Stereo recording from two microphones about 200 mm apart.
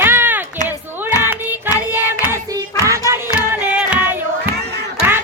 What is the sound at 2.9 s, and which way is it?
Music, 15° right (ahead or behind).